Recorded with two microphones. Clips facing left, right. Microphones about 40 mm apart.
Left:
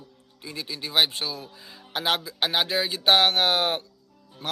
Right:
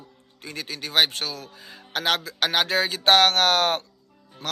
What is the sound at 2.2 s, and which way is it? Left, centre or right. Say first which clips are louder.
Speech: right 2 dB; right.